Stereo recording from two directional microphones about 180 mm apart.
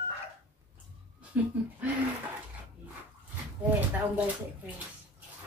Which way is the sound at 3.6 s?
10° right (ahead or behind).